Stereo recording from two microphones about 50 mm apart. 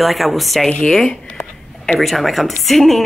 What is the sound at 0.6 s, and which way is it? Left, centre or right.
Speech, centre.